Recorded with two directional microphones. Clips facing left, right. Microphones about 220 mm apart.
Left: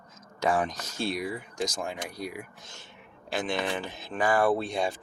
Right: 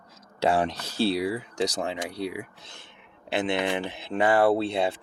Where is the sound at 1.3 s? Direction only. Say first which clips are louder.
Right 5 dB; 75° right (ahead or behind).